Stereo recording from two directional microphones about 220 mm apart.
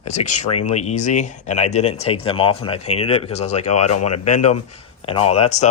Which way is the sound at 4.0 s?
90° left.